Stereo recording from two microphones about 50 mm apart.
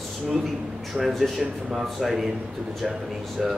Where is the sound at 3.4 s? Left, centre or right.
Centre.